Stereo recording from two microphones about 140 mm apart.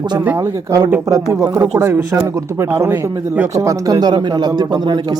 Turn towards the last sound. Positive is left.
turn(degrees=-30)  # may be behind; listen again after turning